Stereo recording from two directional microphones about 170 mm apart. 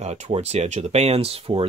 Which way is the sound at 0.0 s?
40° right (ahead or behind).